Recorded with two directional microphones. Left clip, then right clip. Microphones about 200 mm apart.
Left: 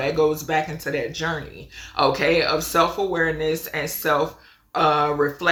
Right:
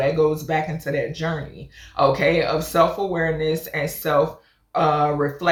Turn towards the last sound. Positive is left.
turn(degrees=20)  # may be behind; listen again after turning